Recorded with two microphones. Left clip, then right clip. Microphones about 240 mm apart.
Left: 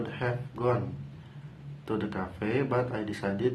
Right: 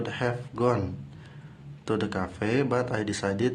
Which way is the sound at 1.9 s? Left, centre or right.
Right.